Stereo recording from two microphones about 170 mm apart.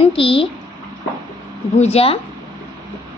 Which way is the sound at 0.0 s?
30° left (ahead or behind).